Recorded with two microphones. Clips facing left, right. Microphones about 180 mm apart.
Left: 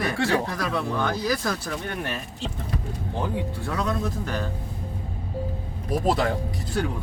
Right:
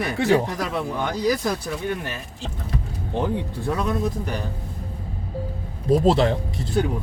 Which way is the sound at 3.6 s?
15° right (ahead or behind).